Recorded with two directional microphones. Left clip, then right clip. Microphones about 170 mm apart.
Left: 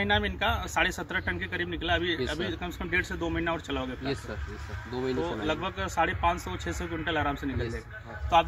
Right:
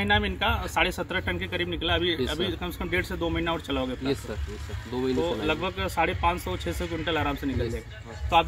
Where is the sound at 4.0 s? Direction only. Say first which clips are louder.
Right 4 dB; 20° left (ahead or behind).